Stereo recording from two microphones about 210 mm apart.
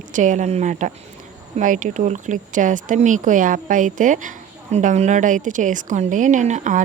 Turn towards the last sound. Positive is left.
turn(degrees=-35)  # may be behind; listen again after turning